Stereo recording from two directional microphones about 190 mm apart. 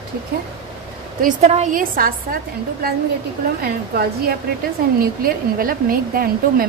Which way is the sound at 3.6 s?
55° right (ahead or behind).